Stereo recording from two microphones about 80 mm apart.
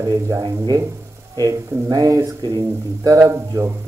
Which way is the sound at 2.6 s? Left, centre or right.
Right.